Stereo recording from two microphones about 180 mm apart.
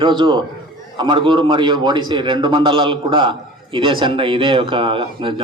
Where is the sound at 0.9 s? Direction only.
25° right (ahead or behind).